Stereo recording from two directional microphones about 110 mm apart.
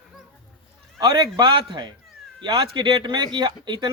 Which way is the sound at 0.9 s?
40° right (ahead or behind).